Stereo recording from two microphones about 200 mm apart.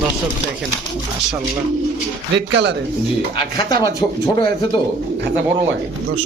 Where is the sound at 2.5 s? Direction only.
60° right (ahead or behind).